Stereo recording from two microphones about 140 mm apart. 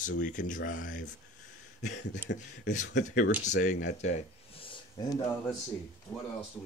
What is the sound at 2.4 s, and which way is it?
Speech, 60° left (ahead or behind).